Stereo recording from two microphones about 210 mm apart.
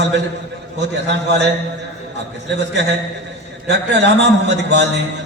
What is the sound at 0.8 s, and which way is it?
Speech, 55° right (ahead or behind).